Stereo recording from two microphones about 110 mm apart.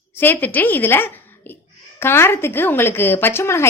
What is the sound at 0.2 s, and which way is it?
A woman's voice, 20° left (ahead or behind).